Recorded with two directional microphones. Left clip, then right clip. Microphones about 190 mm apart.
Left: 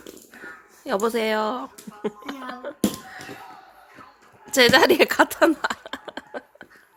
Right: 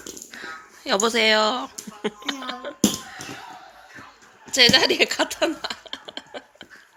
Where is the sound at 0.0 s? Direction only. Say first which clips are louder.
Right 4 dB; 10° left (ahead or behind).